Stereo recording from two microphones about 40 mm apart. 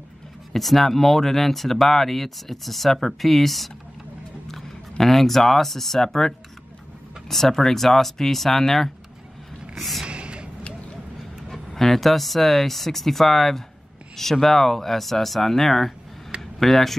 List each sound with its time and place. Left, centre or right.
0.5 s speech: centre
9.8 s a sound: centre
10.0 s gasp: right
11.5 s speech: centre